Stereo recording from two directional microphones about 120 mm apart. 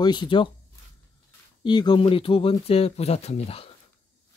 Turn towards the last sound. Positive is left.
turn(degrees=55)  # may be behind; listen again after turning